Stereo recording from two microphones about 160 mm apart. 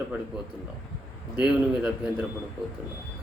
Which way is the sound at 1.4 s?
10° right (ahead or behind).